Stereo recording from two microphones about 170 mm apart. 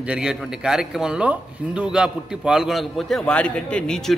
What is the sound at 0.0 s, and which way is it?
A man's voice, 5° right (ahead or behind).